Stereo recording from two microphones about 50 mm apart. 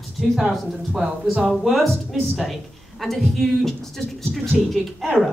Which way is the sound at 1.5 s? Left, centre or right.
Centre.